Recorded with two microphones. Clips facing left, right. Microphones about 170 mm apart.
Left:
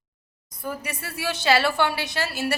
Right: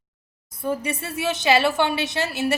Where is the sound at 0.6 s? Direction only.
25° right (ahead or behind).